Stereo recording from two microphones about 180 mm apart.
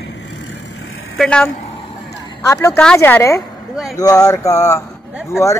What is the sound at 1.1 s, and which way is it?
Speech, 5° left (ahead or behind).